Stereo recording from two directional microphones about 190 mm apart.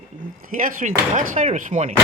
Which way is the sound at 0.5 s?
45° right (ahead or behind).